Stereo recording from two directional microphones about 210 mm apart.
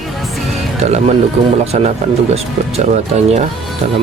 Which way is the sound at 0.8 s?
30° right (ahead or behind).